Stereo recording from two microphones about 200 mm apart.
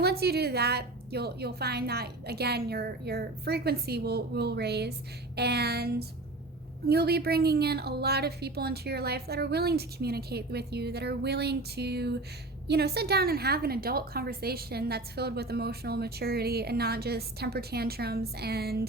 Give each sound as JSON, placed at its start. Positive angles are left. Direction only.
{"t": 0.0, "sound": "a woman's voice", "side_deg": -50}